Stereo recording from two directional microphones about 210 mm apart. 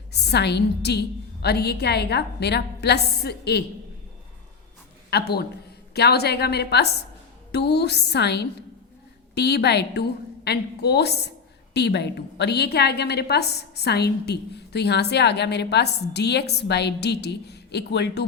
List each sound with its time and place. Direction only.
0.1 s a woman's voice: 50° left (ahead or behind)
5.1 s a woman's voice: 50° left (ahead or behind)